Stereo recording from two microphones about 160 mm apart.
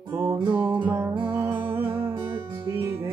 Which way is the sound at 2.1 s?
30° right (ahead or behind).